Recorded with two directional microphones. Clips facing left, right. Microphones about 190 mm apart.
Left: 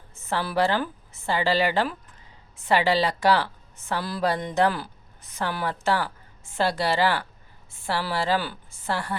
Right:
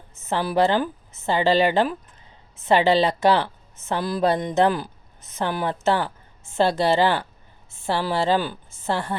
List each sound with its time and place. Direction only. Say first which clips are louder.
0.2 s a woman's voice: right 4 dB; 20° right (ahead or behind)